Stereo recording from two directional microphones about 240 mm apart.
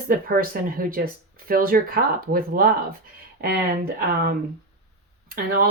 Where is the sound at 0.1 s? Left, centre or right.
Right.